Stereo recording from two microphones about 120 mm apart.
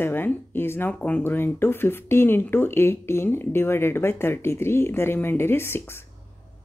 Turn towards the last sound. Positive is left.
turn(degrees=20)  # may be behind; listen again after turning